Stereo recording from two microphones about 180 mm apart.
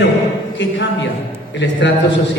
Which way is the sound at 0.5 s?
80° left.